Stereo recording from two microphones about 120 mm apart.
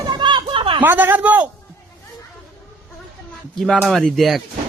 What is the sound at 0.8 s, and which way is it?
Speech, 15° right (ahead or behind).